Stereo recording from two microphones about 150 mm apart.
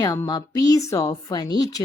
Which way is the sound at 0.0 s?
25° left (ahead or behind).